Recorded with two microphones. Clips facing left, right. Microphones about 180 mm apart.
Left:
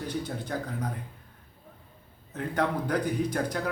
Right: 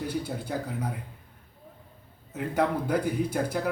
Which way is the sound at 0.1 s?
10° right (ahead or behind).